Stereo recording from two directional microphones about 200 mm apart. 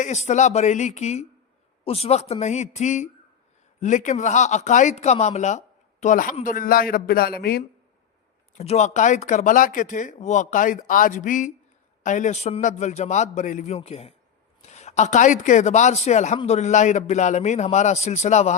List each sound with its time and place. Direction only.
0.0 s speech: 35° left (ahead or behind)
8.5 s speech: 35° left (ahead or behind)